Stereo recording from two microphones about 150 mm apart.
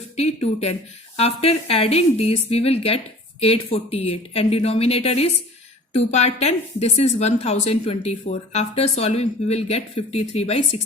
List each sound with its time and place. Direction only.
1.1 s a woman's voice: 45° left (ahead or behind)